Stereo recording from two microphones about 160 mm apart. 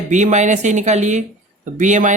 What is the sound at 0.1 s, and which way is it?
Speech, 50° right (ahead or behind).